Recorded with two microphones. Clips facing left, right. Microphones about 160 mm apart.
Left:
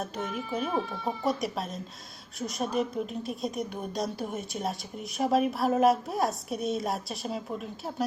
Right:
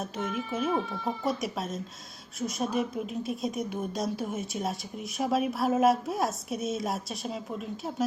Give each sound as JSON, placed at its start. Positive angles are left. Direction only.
{"t": 0.0, "sound": "speech", "side_deg": 0}